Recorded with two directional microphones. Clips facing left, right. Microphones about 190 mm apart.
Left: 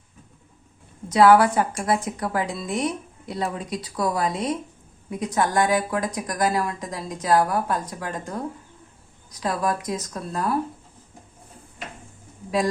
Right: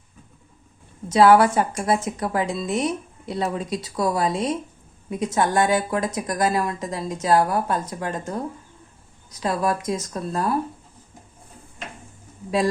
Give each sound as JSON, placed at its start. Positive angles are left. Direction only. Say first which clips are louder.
{"t": 1.1, "sound": "a woman's voice", "louder": "right 1 dB", "side_deg": -25}
{"t": 9.3, "sound": "a woman's voice", "louder": "right 2 dB", "side_deg": -25}